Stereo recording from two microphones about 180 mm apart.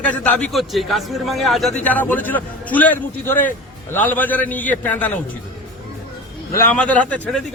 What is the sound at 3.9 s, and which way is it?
A man's voice, 10° left (ahead or behind).